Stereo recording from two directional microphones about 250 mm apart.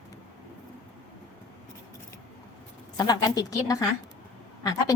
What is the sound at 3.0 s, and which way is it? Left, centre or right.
A woman's voice, centre.